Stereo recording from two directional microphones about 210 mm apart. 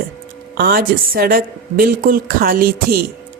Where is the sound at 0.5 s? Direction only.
45° right (ahead or behind).